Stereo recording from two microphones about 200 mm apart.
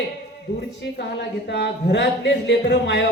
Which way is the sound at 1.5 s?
60° left (ahead or behind).